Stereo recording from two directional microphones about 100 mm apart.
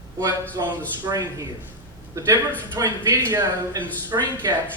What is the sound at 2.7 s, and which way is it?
Speech, 40° right (ahead or behind).